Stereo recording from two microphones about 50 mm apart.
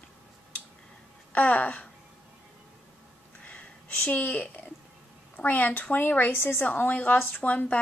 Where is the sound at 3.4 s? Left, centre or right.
Left.